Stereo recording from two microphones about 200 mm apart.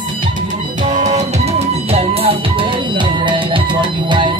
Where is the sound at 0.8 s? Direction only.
35° right (ahead or behind).